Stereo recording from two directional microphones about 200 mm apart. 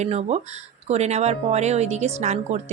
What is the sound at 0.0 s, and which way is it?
Speech, 35° right (ahead or behind).